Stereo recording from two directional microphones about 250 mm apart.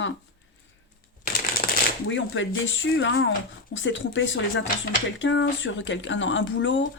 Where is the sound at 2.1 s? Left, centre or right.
Left.